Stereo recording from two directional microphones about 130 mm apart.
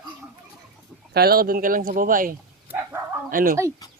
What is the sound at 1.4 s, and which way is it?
Speech, 90° right.